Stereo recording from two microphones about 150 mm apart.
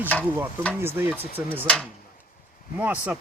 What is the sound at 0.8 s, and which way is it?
Speech, 15° right (ahead or behind).